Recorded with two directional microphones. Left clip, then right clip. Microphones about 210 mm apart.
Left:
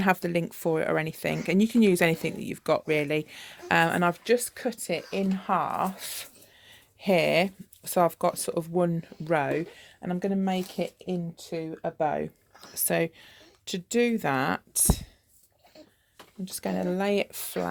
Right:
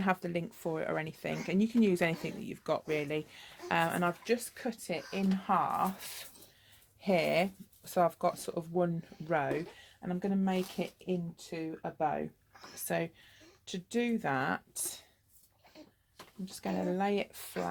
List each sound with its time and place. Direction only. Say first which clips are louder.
0.0 s speech: left 8 dB; 45° left (ahead or behind)
16.5 s speech: left 5 dB; 45° left (ahead or behind)